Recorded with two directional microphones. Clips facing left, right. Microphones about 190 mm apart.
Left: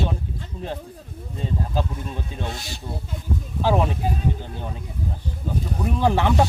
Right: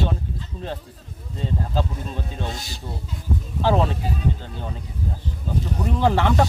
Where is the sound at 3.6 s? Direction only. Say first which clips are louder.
Right 1 dB; 15° left (ahead or behind).